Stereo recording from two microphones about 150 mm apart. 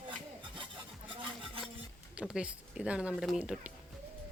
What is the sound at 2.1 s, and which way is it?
A woman's voice, 5° right (ahead or behind).